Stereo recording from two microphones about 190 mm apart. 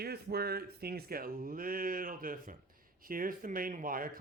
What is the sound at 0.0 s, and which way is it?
Speech, 55° right (ahead or behind).